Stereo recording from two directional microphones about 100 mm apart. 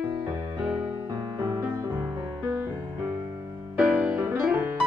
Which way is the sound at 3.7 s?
10° right (ahead or behind).